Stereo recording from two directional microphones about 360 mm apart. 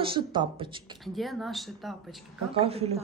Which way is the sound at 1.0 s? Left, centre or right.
Centre.